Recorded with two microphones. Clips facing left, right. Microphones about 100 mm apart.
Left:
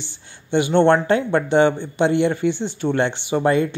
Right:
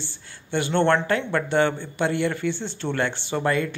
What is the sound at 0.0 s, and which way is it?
A man's voice, 20° left (ahead or behind).